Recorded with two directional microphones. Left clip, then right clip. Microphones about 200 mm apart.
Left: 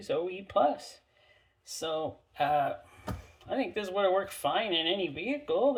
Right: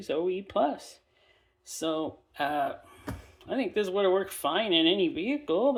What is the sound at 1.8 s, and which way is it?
Speech, 35° right (ahead or behind).